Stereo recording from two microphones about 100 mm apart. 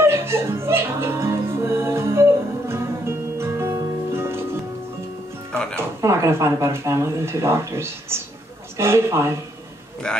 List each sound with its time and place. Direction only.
0.0 s music: 25° right (ahead or behind)
5.5 s music: 10° left (ahead or behind)
5.8 s speech: 30° right (ahead or behind)
10.0 s a man's voice: 10° left (ahead or behind)